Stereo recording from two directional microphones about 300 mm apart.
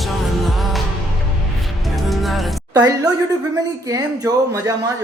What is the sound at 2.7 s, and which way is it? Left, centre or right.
Speech, centre.